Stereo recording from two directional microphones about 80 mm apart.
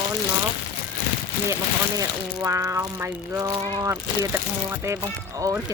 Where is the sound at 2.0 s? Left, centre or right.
Right.